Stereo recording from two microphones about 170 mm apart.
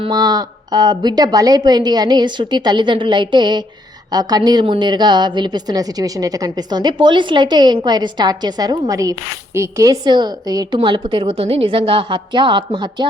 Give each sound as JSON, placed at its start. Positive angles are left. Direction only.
{"t": 0.0, "sound": "a woman's voice", "side_deg": -25}